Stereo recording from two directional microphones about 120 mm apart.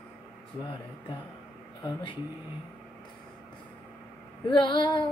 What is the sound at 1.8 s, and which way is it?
Female singing, 45° left (ahead or behind).